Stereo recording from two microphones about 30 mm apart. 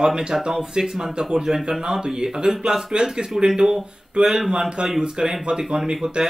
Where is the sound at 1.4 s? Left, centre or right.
Centre.